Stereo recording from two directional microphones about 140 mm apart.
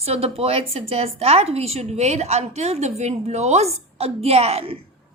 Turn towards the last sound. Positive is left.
turn(degrees=-45)  # may be behind; listen again after turning